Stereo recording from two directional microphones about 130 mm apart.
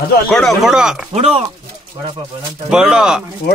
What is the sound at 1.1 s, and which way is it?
Speech, 50° right (ahead or behind).